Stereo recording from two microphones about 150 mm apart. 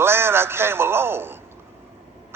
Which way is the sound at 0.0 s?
15° right (ahead or behind).